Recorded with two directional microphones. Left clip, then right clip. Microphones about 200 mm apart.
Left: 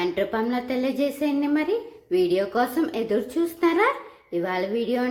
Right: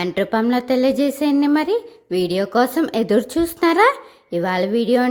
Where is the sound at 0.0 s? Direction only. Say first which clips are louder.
Right 5 dB; 45° right (ahead or behind).